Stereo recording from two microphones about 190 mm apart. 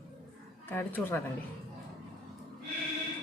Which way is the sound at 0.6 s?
10° left (ahead or behind).